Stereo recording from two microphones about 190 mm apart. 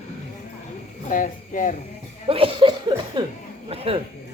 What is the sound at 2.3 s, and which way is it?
Cough, 25° right (ahead or behind).